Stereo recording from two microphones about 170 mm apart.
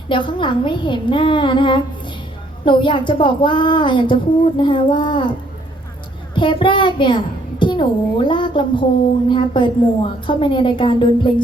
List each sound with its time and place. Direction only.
0.1 s speech: 30° left (ahead or behind)
6.3 s a woman's voice: 30° left (ahead or behind)